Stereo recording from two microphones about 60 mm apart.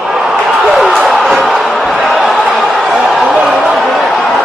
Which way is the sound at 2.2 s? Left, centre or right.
Centre.